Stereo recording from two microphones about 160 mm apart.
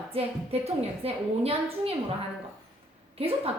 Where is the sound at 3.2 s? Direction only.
40° right (ahead or behind).